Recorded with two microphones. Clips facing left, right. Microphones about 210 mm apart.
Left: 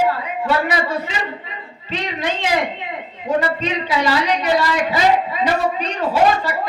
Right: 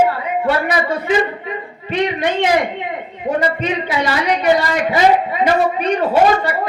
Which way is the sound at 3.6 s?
55° right (ahead or behind).